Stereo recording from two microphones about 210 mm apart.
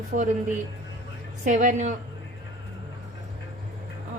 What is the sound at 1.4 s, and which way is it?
Speech, 35° right (ahead or behind).